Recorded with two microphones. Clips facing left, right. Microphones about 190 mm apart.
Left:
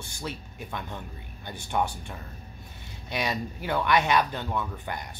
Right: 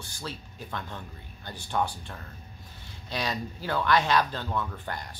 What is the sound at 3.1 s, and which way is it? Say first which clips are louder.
Speech: left 2 dB; 15° left (ahead or behind).